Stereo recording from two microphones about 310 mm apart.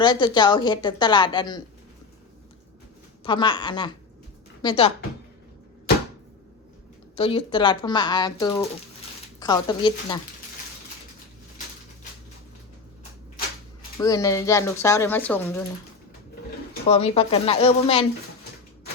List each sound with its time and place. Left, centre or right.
0.0 s speech: centre
3.2 s speech: centre
7.2 s speech: centre
14.0 s speech: centre
16.9 s speech: centre